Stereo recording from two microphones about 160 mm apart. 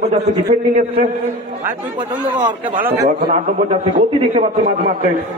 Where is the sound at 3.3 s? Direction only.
35° right (ahead or behind).